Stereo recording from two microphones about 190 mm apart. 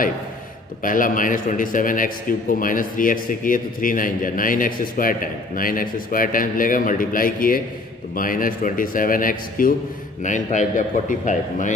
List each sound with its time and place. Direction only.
0.8 s a man's voice: 45° left (ahead or behind)